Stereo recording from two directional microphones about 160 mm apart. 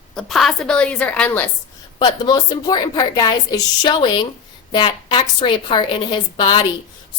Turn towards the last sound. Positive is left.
turn(degrees=30)  # may be behind; listen again after turning